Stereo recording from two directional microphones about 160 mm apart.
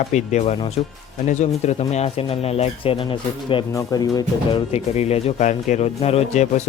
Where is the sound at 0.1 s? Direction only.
45° left (ahead or behind).